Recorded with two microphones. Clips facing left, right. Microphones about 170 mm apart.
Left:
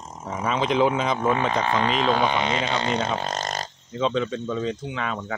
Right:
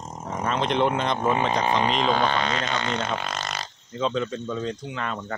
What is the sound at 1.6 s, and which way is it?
Speech, 15° right (ahead or behind).